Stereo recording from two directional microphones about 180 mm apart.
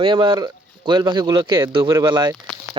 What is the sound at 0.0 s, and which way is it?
Speech, 25° right (ahead or behind).